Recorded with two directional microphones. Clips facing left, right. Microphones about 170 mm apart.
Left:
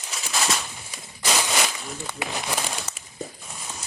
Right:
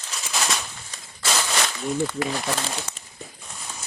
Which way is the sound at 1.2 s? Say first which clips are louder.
Left 1 dB; 15° left (ahead or behind).